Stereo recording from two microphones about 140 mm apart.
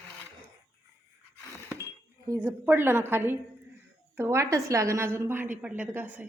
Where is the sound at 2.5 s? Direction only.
15° right (ahead or behind).